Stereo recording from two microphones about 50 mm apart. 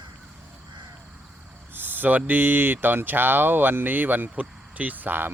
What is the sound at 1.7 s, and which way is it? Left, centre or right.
Speech, right.